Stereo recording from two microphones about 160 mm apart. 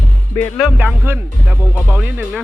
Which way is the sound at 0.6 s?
5° right (ahead or behind).